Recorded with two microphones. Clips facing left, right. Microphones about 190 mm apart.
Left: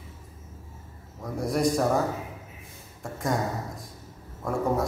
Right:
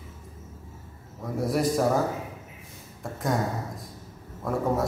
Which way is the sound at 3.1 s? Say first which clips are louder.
Even; centre (ahead or behind).